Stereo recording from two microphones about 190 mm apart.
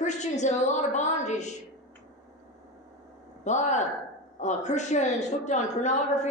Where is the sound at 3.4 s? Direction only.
40° left (ahead or behind).